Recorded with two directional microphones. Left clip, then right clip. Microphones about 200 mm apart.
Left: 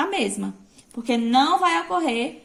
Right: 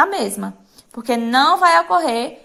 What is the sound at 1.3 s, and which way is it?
Speech, 40° right (ahead or behind).